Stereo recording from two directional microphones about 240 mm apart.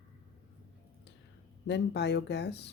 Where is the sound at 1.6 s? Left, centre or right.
Left.